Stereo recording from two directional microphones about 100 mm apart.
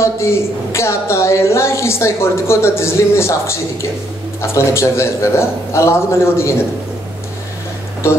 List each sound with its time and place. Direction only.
0.0 s a woman's voice: 30° left (ahead or behind)